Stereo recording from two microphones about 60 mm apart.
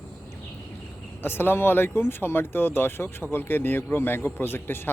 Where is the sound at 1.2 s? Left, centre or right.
Left.